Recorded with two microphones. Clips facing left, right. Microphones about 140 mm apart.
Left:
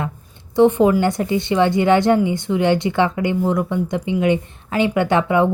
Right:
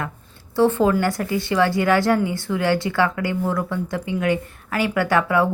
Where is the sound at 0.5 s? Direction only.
20° left (ahead or behind).